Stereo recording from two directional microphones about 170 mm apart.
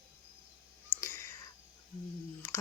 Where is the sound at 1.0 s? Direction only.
15° left (ahead or behind).